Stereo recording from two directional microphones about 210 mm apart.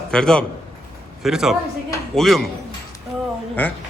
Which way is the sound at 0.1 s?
5° left (ahead or behind).